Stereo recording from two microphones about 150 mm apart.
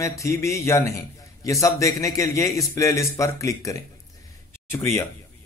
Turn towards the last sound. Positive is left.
turn(degrees=15)  # may be behind; listen again after turning